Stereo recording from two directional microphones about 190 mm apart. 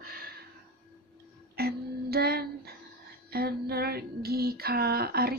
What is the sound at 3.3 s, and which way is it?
Female singing, 55° right (ahead or behind).